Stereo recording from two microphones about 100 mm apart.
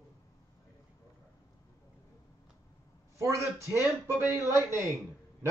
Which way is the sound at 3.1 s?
30° right (ahead or behind).